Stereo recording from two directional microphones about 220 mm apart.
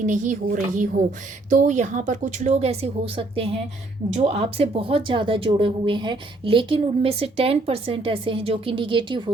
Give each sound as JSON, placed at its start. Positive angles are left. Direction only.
{"t": 0.0, "sound": "a woman's voice", "side_deg": -35}